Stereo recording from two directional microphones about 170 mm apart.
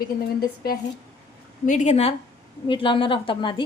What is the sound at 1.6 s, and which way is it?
Speech, 45° left (ahead or behind).